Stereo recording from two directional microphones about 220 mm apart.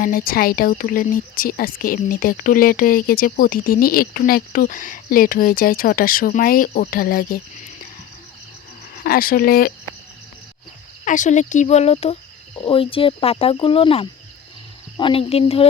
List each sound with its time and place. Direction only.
0.0 s speech: 40° left (ahead or behind)
9.0 s speech: 40° left (ahead or behind)
11.0 s speech: 35° left (ahead or behind)
12.5 s cricket: 25° left (ahead or behind)